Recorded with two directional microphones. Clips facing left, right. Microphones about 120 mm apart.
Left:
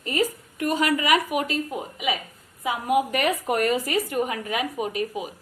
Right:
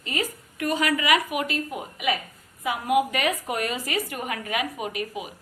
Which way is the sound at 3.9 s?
35° left (ahead or behind).